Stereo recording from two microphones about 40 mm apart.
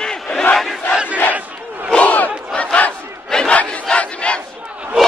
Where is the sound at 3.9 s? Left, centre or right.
Left.